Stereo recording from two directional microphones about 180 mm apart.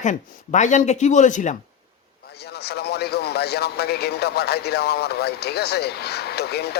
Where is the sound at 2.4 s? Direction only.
65° left (ahead or behind).